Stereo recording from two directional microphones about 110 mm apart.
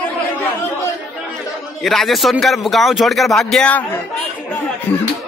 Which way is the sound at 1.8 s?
Centre (ahead or behind).